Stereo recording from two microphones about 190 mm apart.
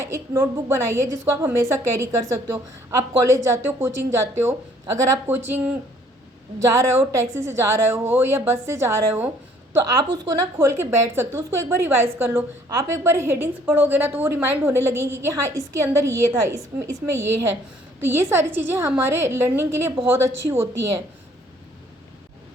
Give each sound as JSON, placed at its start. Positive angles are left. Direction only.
{"t": 0.1, "sound": "speech", "side_deg": -15}
{"t": 6.6, "sound": "speech", "side_deg": -15}
{"t": 18.0, "sound": "speech", "side_deg": -15}